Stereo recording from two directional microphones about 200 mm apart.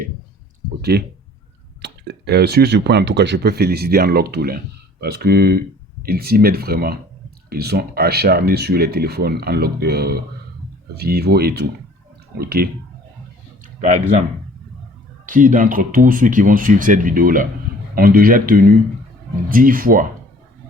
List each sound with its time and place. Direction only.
0.8 s speech: 55° right (ahead or behind)
15.3 s speech: 40° right (ahead or behind)